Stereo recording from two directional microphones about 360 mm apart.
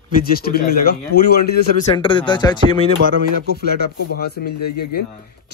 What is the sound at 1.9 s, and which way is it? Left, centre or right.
Speech, centre.